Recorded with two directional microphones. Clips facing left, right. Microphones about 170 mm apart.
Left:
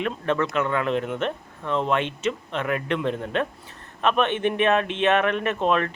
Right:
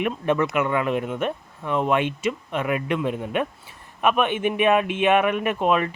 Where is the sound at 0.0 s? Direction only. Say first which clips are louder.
Right 2 dB; 15° right (ahead or behind).